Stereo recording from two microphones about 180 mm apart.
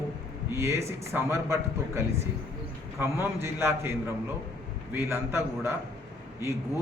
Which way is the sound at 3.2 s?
15° right (ahead or behind).